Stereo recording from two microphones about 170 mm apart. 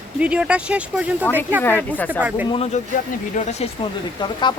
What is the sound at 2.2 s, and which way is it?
Speech, 10° right (ahead or behind).